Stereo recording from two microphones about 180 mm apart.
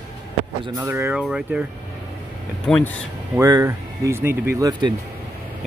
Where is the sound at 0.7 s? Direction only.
15° right (ahead or behind).